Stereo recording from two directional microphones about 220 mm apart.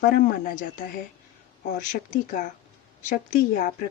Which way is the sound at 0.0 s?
40° left (ahead or behind).